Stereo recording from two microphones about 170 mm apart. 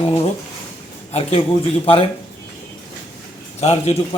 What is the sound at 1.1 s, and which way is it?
Speech, 35° left (ahead or behind).